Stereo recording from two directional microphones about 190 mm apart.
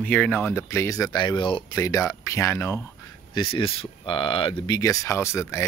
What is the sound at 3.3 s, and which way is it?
Speech, 25° left (ahead or behind).